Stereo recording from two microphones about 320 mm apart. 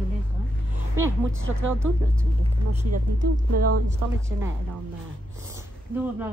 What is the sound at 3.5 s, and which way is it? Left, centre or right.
Speech, right.